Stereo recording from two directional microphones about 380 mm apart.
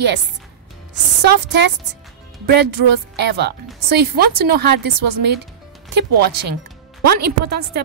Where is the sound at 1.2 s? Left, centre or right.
Right.